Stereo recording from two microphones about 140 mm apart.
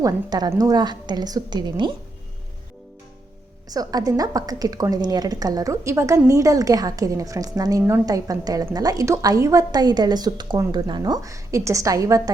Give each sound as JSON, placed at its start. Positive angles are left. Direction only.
{"t": 0.0, "sound": "a woman's voice", "side_deg": -30}
{"t": 3.7, "sound": "a woman's voice", "side_deg": -25}